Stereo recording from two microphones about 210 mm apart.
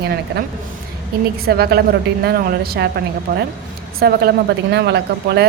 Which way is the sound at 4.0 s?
50° right (ahead or behind).